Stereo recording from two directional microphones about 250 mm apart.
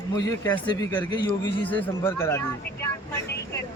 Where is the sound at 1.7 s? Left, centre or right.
Centre.